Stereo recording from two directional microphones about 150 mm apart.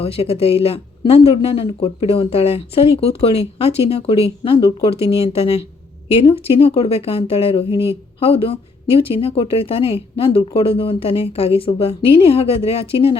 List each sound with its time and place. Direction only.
0.0 s speech: 40° left (ahead or behind)